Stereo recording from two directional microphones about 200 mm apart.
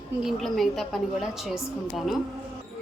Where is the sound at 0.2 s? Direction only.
Centre (ahead or behind).